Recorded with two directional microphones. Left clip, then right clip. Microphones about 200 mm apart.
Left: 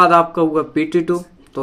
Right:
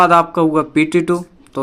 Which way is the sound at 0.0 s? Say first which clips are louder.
Right 1 dB; 30° right (ahead or behind).